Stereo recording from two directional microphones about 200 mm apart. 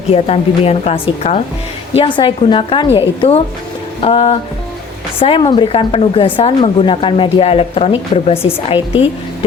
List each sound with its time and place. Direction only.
0.1 s a woman's voice: 30° left (ahead or behind)